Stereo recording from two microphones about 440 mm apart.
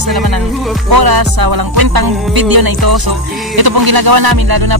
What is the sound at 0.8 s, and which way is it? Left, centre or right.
Music, right.